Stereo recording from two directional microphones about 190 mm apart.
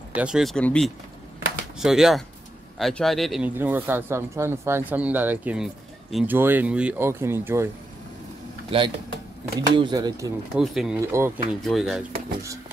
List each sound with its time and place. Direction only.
0.1 s speech: 5° right (ahead or behind)
8.6 s speech: 25° right (ahead or behind)
10.5 s speech: centre (ahead or behind)
11.0 s speech: 15° right (ahead or behind)
11.6 s speech: centre (ahead or behind)